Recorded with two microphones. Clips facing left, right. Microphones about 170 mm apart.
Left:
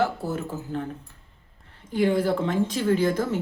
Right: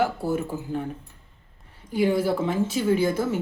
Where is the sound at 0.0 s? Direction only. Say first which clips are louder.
Right 2 dB; 10° right (ahead or behind).